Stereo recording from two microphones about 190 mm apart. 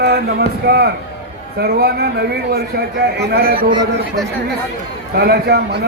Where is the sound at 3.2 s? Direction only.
55° right (ahead or behind).